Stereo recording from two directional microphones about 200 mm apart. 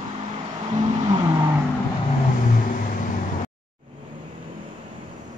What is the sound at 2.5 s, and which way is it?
Vehicle, 45° left (ahead or behind).